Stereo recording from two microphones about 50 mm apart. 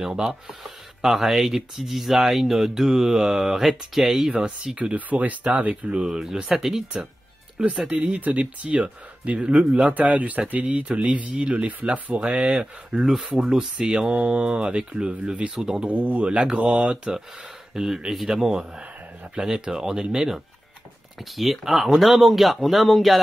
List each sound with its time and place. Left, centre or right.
0.0 s speech: centre
4.7 s speech: right
5.9 s speech: centre
9.9 s speech: right
13.1 s speech: centre
15.9 s speech: right
17.7 s speech: centre